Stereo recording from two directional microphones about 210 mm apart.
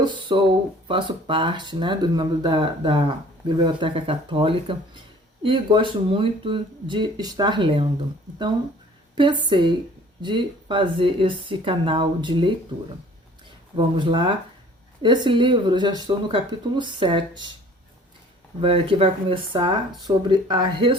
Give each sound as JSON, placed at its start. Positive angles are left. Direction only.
{"t": 0.0, "sound": "speech", "side_deg": -20}
{"t": 9.1, "sound": "speech", "side_deg": -20}
{"t": 13.7, "sound": "speech", "side_deg": -20}
{"t": 18.6, "sound": "speech", "side_deg": -25}